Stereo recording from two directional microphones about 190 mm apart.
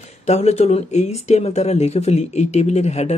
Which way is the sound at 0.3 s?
35° left (ahead or behind).